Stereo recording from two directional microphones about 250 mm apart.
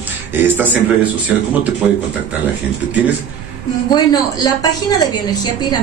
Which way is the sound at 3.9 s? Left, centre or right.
Centre.